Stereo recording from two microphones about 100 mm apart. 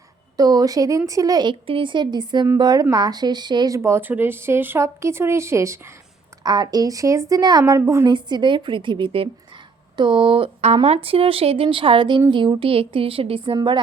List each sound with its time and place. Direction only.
0.3 s speech: 40° right (ahead or behind)
1.6 s a woman's voice: 60° right (ahead or behind)
3.8 s speech: 25° right (ahead or behind)
6.4 s speech: 40° right (ahead or behind)
7.8 s speech: 25° right (ahead or behind)
8.0 s a woman's voice: 50° right (ahead or behind)